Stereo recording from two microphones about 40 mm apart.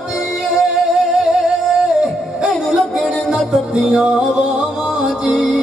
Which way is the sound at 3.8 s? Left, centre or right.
Right.